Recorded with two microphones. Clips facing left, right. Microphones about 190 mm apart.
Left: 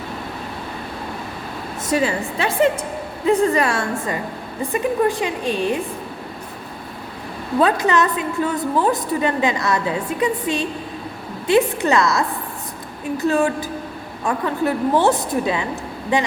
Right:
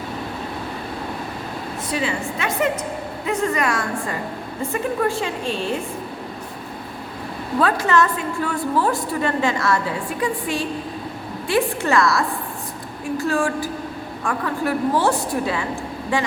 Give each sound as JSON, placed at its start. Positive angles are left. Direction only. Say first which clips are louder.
{"t": 1.9, "sound": "a woman's voice", "louder": "left 5 dB", "side_deg": 45}
{"t": 3.2, "sound": "a woman's voice", "louder": "left 5 dB", "side_deg": 30}
{"t": 7.6, "sound": "a woman's voice", "louder": "left 1 dB", "side_deg": 20}